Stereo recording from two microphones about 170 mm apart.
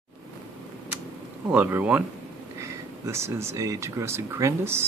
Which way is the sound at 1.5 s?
10° right (ahead or behind).